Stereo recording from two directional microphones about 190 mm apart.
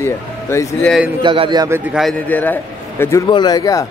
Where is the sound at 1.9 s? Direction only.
Centre (ahead or behind); by 3.8 s 20° left (ahead or behind).